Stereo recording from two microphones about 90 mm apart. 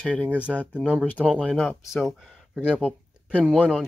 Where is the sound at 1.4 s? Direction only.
10° left (ahead or behind).